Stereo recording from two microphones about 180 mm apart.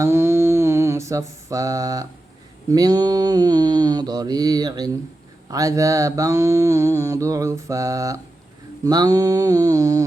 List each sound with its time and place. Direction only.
0.0 s mantra: 15° right (ahead or behind)